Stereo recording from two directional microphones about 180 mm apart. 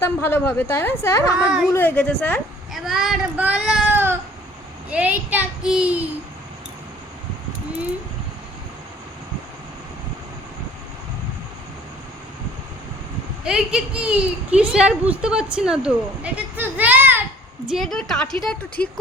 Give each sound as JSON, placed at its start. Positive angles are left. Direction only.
{"t": 0.0, "sound": "a woman's voice", "side_deg": 15}
{"t": 2.7, "sound": "a woman's voice", "side_deg": 0}
{"t": 13.4, "sound": "a woman's voice", "side_deg": -5}
{"t": 17.7, "sound": "a woman's voice", "side_deg": 0}